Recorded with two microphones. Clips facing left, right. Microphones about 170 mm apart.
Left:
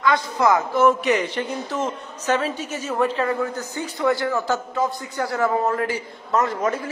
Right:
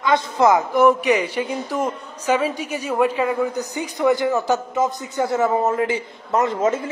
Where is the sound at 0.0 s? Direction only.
20° right (ahead or behind).